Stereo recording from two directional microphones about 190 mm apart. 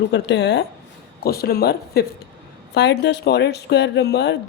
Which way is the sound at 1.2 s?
55° left (ahead or behind).